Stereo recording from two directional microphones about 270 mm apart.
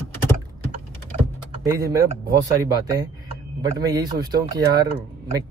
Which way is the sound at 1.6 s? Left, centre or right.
Centre.